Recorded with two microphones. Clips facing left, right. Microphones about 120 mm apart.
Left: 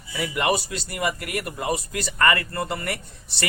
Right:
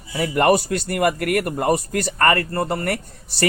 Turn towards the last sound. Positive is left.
turn(degrees=-40)  # may be behind; listen again after turning